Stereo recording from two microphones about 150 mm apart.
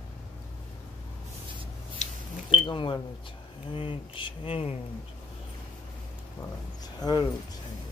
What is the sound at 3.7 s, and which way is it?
Speech, 35° left (ahead or behind).